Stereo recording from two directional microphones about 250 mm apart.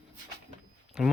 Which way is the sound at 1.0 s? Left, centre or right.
Centre.